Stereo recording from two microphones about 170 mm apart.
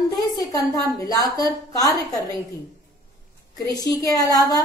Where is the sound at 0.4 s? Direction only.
20° left (ahead or behind).